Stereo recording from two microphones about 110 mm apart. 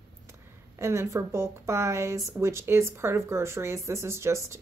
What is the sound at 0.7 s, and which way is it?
Speech, 25° right (ahead or behind).